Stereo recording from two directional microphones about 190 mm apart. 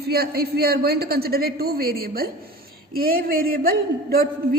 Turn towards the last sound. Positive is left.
turn(degrees=-50)  # may be behind; listen again after turning